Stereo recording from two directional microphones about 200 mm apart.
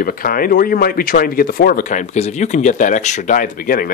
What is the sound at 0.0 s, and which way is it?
Speech, 45° left (ahead or behind).